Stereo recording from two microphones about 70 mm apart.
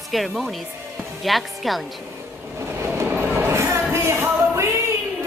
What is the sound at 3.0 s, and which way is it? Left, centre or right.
Train, right.